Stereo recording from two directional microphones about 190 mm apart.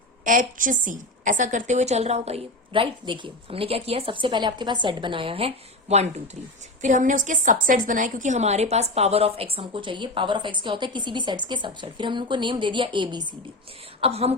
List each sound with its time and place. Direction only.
0.3 s a woman's voice: 45° right (ahead or behind)